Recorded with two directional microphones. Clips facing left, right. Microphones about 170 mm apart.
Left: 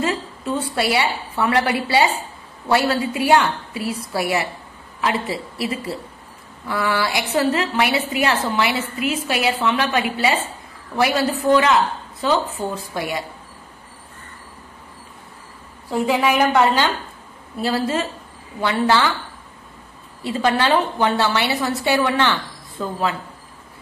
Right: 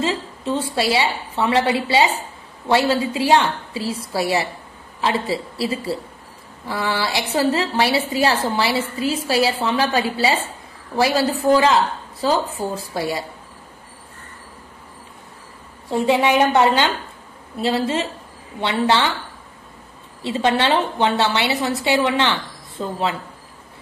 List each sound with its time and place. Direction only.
0.0 s a woman's voice: 25° right (ahead or behind)
15.9 s a woman's voice: 25° right (ahead or behind)
20.2 s a woman's voice: 25° right (ahead or behind)